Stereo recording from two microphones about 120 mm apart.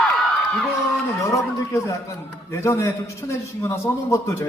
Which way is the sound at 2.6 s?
25° left (ahead or behind).